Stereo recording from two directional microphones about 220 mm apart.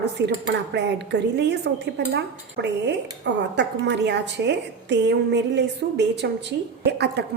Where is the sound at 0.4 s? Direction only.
50° right (ahead or behind).